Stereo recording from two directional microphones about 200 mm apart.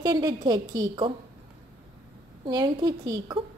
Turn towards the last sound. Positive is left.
turn(degrees=-20)  # may be behind; listen again after turning